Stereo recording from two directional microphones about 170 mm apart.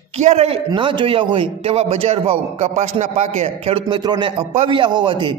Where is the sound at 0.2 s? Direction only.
40° right (ahead or behind).